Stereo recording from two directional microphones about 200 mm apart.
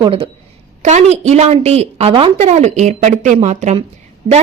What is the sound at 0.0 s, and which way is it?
A woman's voice, 25° right (ahead or behind).